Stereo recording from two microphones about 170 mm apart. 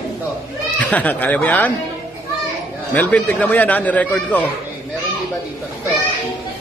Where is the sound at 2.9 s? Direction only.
10° left (ahead or behind).